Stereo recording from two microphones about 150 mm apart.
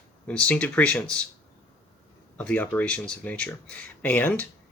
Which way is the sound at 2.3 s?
10° left (ahead or behind).